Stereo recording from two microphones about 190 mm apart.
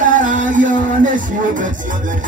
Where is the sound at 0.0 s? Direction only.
45° right (ahead or behind).